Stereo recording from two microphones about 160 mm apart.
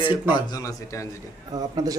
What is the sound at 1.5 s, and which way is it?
Speech, 25° right (ahead or behind).